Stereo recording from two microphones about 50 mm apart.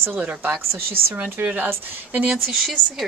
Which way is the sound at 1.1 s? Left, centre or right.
Right.